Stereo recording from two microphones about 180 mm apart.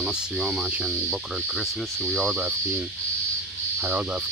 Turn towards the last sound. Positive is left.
turn(degrees=-15)  # may be behind; listen again after turning